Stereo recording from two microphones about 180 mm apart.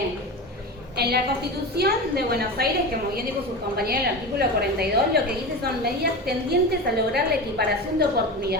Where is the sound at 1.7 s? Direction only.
60° right (ahead or behind).